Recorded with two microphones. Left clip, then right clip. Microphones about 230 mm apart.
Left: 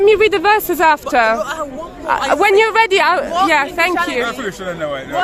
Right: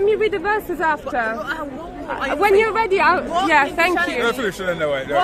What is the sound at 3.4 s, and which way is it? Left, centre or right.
Speech, centre.